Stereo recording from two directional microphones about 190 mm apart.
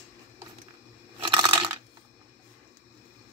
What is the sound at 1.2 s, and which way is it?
Coin, 25° right (ahead or behind).